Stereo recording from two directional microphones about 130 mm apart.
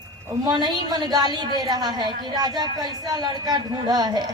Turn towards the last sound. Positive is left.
turn(degrees=-30)  # may be behind; listen again after turning